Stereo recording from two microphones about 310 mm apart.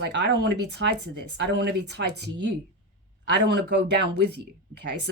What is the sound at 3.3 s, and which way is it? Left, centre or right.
Speech, right.